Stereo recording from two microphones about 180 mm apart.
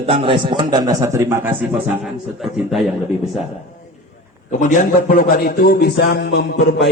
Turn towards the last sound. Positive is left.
turn(degrees=70)  # may be behind; listen again after turning